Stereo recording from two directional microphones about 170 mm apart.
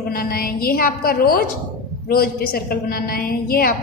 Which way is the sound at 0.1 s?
60° left (ahead or behind).